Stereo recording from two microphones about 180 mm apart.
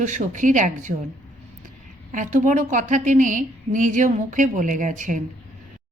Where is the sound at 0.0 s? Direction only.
45° right (ahead or behind).